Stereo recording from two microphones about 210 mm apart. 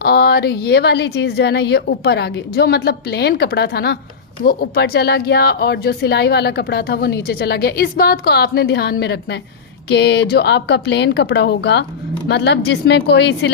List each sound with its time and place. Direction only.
0.0 s a woman's voice: 50° left (ahead or behind)